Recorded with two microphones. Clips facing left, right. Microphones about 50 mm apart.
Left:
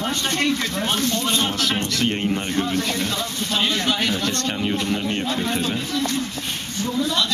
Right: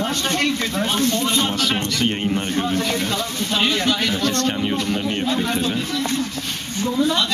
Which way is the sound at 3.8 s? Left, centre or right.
Centre.